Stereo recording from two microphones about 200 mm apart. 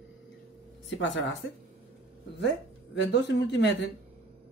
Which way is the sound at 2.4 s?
60° left (ahead or behind).